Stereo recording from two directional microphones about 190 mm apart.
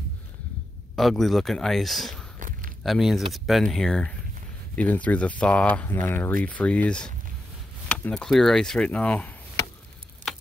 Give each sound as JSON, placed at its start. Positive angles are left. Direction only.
{"t": 0.9, "sound": "speech", "side_deg": 0}
{"t": 2.3, "sound": "a sound", "side_deg": -45}
{"t": 2.8, "sound": "speech", "side_deg": 0}